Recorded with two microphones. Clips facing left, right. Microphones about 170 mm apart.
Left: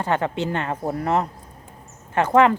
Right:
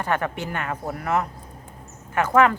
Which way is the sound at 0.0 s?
25° left (ahead or behind).